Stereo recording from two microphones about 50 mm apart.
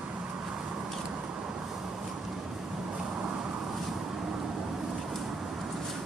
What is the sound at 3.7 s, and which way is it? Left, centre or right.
Vehicle, centre.